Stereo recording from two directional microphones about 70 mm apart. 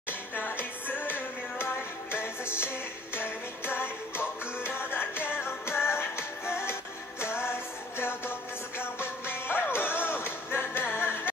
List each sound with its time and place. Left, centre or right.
0.3 s music: left